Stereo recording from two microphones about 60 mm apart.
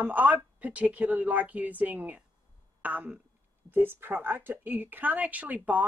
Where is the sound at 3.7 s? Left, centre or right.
Right.